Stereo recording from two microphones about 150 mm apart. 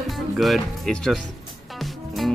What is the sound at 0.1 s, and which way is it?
Speech, centre (ahead or behind).